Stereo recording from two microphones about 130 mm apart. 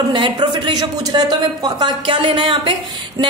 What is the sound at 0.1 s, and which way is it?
A woman's voice, 35° right (ahead or behind).